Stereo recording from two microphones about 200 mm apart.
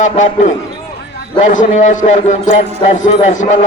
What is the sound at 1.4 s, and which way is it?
A man's voice, 35° left (ahead or behind).